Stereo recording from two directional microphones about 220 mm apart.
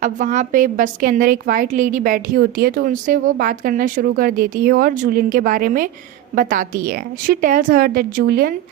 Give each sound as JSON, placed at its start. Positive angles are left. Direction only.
{"t": 0.0, "sound": "a woman's voice", "side_deg": -35}